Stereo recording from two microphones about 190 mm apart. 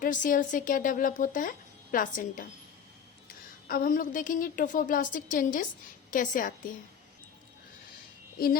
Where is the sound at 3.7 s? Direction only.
50° left (ahead or behind).